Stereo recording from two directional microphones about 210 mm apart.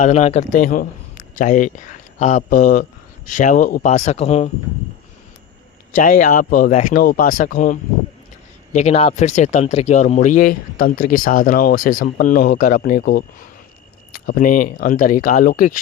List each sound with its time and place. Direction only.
0.0 s speech: 30° left (ahead or behind)
5.9 s speech: 40° left (ahead or behind)